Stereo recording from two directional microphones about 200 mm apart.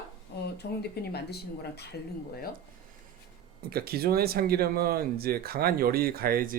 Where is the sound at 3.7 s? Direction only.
50° right (ahead or behind).